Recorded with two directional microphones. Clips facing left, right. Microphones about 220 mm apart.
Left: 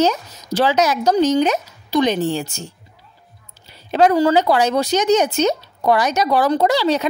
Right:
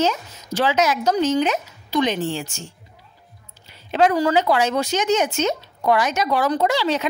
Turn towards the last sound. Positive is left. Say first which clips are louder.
# left 4 dB
turn(degrees=35)  # may be behind; listen again after turning